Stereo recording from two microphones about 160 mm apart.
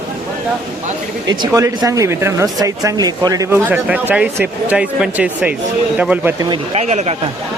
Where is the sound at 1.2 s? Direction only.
25° right (ahead or behind).